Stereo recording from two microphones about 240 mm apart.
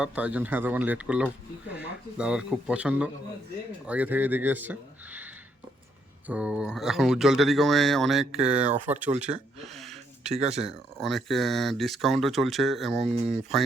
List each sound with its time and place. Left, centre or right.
0.0 s speech: centre
9.2 s a sound: centre
10.2 s speech: right
11.0 s speech: centre